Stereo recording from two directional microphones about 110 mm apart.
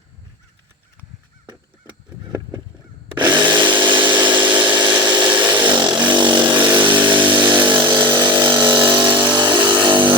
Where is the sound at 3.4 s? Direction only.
45° right (ahead or behind).